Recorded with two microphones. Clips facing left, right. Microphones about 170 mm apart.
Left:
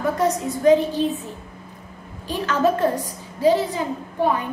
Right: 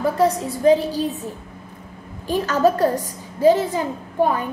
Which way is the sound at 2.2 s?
40° right (ahead or behind).